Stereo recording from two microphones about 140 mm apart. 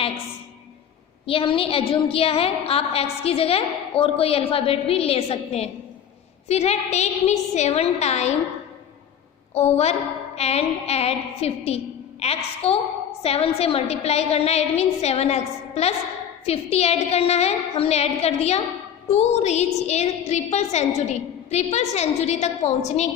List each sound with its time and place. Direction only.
1.3 s a woman's voice: 40° left (ahead or behind)
9.6 s a woman's voice: 50° left (ahead or behind)